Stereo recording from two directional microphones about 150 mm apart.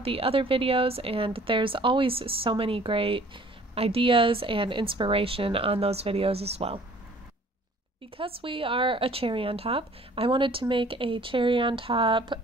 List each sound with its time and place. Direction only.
0.0 s speech: 40° right (ahead or behind)
8.4 s speech: 35° right (ahead or behind)